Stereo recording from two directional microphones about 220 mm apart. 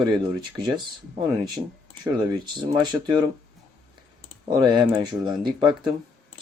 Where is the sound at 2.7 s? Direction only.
20° right (ahead or behind).